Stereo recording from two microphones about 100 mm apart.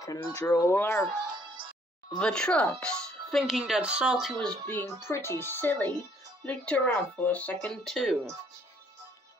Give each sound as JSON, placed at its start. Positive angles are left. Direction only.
{"t": 0.3, "sound": "speech", "side_deg": 30}
{"t": 2.1, "sound": "speech", "side_deg": 10}
{"t": 4.6, "sound": "speech", "side_deg": 20}